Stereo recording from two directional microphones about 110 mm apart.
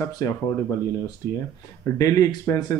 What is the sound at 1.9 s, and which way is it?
Speech, 30° left (ahead or behind).